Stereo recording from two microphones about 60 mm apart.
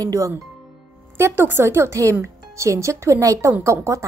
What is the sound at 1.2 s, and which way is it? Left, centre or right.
A woman's voice, right.